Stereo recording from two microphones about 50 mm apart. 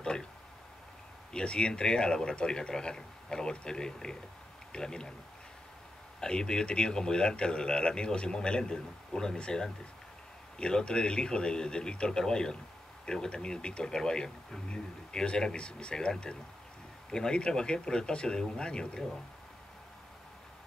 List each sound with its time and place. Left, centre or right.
1.3 s speech: centre
6.2 s speech: centre
17.1 s speech: centre